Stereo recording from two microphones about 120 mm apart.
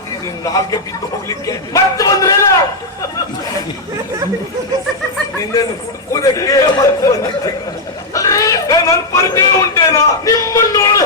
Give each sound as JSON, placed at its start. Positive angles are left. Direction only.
{"t": 0.4, "sound": "a man's voice", "side_deg": 30}
{"t": 6.1, "sound": "a man's voice", "side_deg": 30}
{"t": 8.1, "sound": "chicken", "side_deg": 30}
{"t": 9.3, "sound": "a man's voice", "side_deg": 30}